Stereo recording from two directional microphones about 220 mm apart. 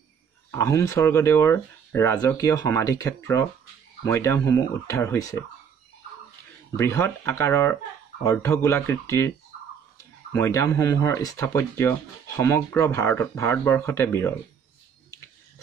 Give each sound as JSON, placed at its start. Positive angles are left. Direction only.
{"t": 0.6, "sound": "speech", "side_deg": 15}
{"t": 6.8, "sound": "speech", "side_deg": 10}
{"t": 10.3, "sound": "speech", "side_deg": 15}